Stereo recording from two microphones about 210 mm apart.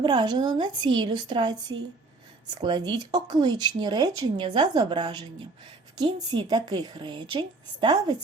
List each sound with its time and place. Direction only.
0.0 s speech: 20° right (ahead or behind)